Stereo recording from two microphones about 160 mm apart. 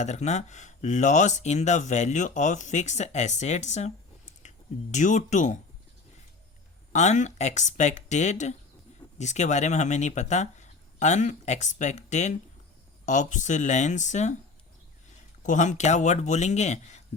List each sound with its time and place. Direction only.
0.0 s speech: 45° left (ahead or behind)
6.9 s speech: 45° left (ahead or behind)
15.4 s speech: 50° left (ahead or behind)